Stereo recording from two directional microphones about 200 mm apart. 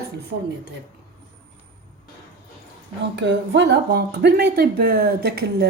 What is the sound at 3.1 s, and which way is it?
Speech, 60° right (ahead or behind).